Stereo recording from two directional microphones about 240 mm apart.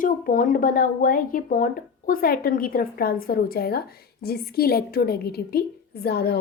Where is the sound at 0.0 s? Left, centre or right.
Left.